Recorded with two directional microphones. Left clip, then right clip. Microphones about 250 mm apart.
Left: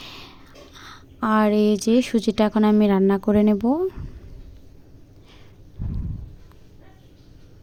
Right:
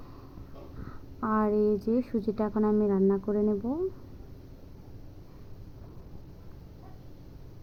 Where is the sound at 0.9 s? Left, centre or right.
Left.